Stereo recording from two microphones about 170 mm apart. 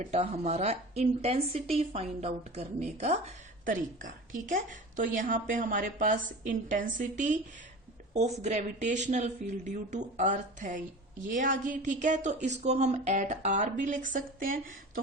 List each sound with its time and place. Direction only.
0.0 s a woman's voice: 40° right (ahead or behind)